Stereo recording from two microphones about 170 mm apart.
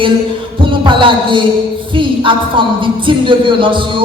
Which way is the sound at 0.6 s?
30° right (ahead or behind).